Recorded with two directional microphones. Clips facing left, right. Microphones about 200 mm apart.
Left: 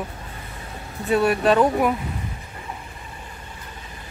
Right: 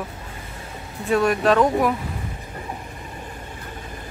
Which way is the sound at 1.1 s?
5° left (ahead or behind).